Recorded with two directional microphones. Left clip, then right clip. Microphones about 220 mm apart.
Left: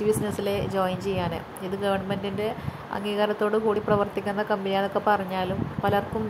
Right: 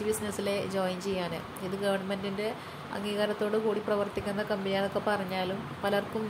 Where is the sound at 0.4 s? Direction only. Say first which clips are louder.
Left 5 dB; 10° left (ahead or behind).